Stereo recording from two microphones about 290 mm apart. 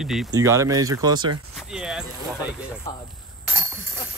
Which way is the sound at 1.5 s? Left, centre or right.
Centre.